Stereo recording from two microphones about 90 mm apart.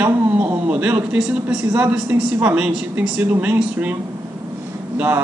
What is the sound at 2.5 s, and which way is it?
A man's voice, 10° right (ahead or behind).